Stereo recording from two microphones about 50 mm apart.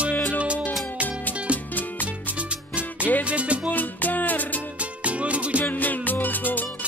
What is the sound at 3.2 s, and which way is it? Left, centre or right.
Music, right.